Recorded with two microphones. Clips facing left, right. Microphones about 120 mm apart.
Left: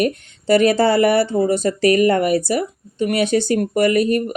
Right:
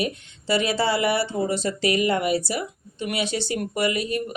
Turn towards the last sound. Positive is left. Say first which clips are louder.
# left 9 dB
turn(degrees=50)  # may be behind; listen again after turning